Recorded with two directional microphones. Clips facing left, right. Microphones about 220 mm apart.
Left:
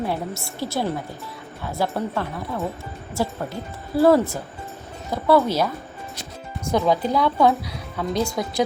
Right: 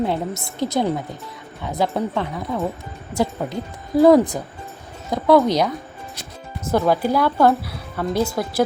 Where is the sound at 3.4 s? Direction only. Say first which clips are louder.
Right 3 dB; 15° right (ahead or behind).